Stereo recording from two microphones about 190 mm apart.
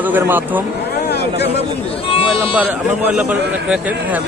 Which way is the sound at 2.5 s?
10° right (ahead or behind).